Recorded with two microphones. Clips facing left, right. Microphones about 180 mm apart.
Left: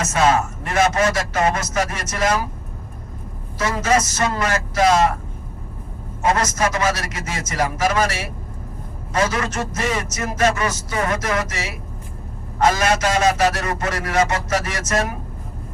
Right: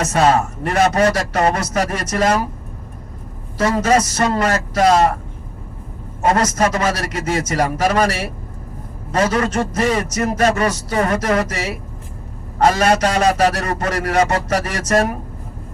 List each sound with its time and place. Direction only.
0.0 s a man's voice: 35° right (ahead or behind)
3.6 s a man's voice: 35° right (ahead or behind)
6.2 s a man's voice: 35° right (ahead or behind)
9.1 s a man's voice: 35° right (ahead or behind)